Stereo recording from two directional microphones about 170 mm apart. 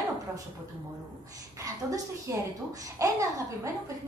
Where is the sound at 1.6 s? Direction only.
20° right (ahead or behind).